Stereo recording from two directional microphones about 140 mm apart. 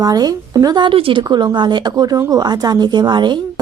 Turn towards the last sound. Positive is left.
turn(degrees=-30)  # may be behind; listen again after turning